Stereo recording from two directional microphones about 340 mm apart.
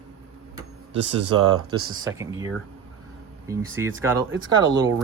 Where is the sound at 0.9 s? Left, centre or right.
Right.